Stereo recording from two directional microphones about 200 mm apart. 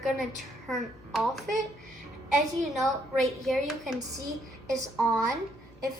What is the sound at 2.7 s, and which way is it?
A child's voice, centre (ahead or behind).